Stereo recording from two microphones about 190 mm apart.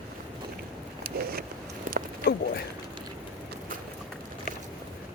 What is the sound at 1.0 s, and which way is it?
Vehicle, 55° right (ahead or behind).